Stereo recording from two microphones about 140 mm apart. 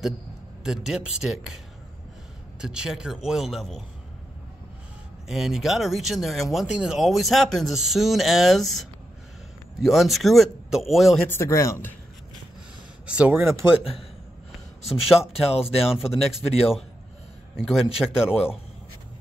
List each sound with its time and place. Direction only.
0.7 s speech: 5° right (ahead or behind)
2.6 s speech: 5° right (ahead or behind)
5.3 s speech: 5° right (ahead or behind)
11.2 s speech: 15° left (ahead or behind)
13.0 s speech: 10° right (ahead or behind)
14.9 s speech: 5° right (ahead or behind)